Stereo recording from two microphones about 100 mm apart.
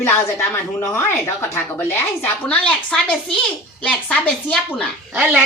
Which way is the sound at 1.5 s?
25° left (ahead or behind).